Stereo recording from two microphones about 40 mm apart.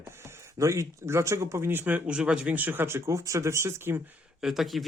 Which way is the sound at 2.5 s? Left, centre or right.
Right.